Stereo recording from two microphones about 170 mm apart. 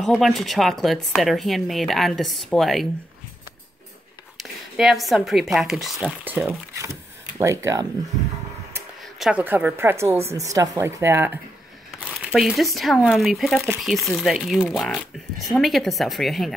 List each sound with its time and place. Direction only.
0.0 s a woman's voice: centre (ahead or behind)
4.4 s a woman's voice: centre (ahead or behind); by 7.8 s 15° right (ahead or behind)
9.0 s a woman's voice: 5° right (ahead or behind)
12.0 s a woman's voice: centre (ahead or behind)